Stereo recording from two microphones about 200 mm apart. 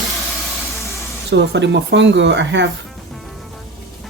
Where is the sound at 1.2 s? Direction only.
60° right (ahead or behind).